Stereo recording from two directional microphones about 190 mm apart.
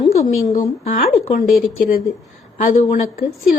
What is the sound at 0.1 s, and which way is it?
A woman's voice, 35° left (ahead or behind).